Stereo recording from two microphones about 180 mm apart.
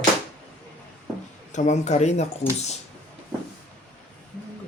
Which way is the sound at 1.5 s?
40° left (ahead or behind).